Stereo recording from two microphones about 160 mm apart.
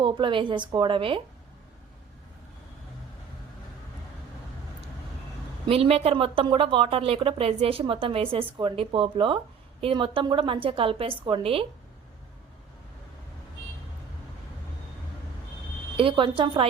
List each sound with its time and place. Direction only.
0.0 s a woman's voice: 30° right (ahead or behind)
5.6 s a woman's voice: 35° right (ahead or behind)
16.0 s a woman's voice: 35° right (ahead or behind)